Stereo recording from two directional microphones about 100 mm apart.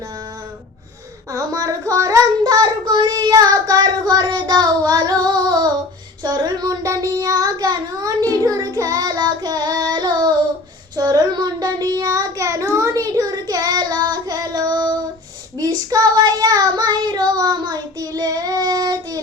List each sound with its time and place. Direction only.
1.3 s child singing: 35° right (ahead or behind)